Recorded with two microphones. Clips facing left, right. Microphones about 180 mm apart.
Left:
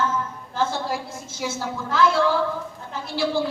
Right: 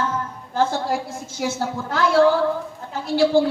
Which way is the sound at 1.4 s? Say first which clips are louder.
Right 4 dB; 45° right (ahead or behind).